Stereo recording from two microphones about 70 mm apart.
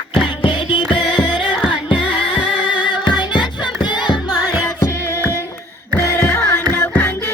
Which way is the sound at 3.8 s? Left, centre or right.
Left.